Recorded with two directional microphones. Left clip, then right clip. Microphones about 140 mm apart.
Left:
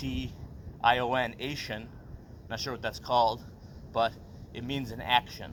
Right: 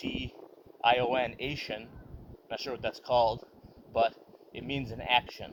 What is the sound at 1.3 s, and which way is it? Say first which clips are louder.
Speech: even; 25° right (ahead or behind).